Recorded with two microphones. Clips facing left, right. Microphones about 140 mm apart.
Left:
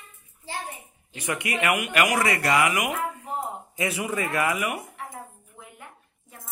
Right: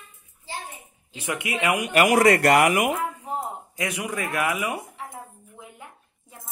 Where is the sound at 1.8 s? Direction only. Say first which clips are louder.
Right 5 dB; 35° right (ahead or behind).